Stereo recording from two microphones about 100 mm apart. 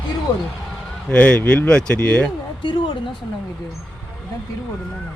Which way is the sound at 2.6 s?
55° left (ahead or behind).